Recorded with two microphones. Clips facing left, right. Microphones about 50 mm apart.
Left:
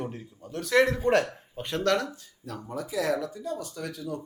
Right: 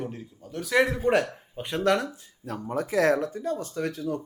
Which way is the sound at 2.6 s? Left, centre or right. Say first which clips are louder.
Right 6 dB; right.